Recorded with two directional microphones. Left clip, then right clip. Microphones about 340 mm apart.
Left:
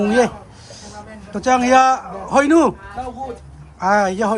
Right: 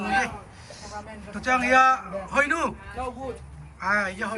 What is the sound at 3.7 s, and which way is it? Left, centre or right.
Speech, centre.